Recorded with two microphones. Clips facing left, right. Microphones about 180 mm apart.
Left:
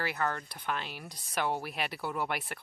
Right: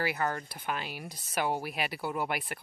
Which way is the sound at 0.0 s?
10° right (ahead or behind).